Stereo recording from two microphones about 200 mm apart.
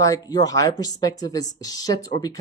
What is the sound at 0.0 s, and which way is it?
Speech, 20° left (ahead or behind).